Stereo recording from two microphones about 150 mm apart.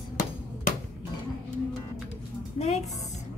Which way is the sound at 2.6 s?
50° left (ahead or behind).